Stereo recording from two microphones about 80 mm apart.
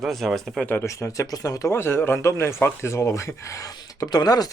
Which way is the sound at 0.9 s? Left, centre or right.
Left.